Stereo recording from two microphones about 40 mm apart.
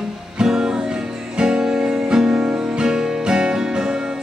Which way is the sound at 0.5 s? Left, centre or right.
Centre.